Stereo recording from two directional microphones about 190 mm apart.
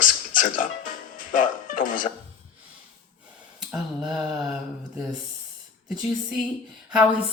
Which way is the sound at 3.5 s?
5° right (ahead or behind).